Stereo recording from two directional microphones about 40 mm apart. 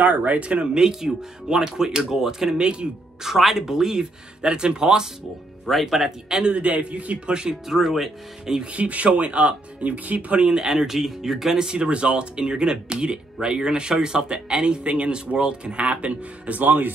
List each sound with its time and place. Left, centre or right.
0.0 s speech: right
0.7 s speech: centre
3.3 s speech: centre
5.7 s speech: centre
6.2 s speech: right
7.6 s speech: centre
8.7 s speech: right; by 11.5 s centre
11.5 s speech: right